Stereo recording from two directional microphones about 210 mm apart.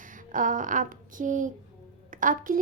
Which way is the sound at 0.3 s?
40° right (ahead or behind).